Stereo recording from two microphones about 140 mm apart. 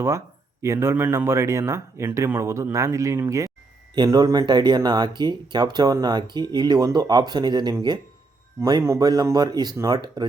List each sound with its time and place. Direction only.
0.6 s speech: 20° right (ahead or behind)